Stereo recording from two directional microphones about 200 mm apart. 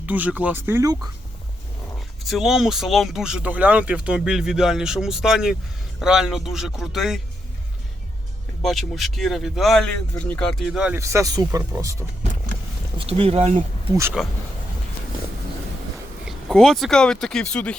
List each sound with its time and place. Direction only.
0.0 s speech: 10° right (ahead or behind)
2.0 s speech: centre (ahead or behind)
8.6 s speech: centre (ahead or behind)
13.0 s speech: 25° right (ahead or behind)
14.2 s speech: centre (ahead or behind)
16.2 s speech: centre (ahead or behind)